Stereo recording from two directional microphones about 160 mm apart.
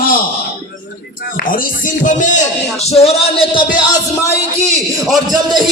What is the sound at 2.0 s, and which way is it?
Speech, 50° left (ahead or behind).